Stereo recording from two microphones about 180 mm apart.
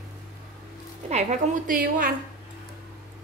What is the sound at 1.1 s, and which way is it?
A woman's voice, 40° right (ahead or behind).